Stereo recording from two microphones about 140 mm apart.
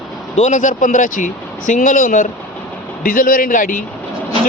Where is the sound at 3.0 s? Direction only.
80° left.